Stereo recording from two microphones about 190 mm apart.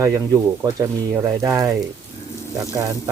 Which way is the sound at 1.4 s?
15° right (ahead or behind).